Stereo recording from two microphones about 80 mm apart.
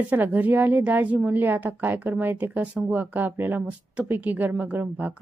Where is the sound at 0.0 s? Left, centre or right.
Right.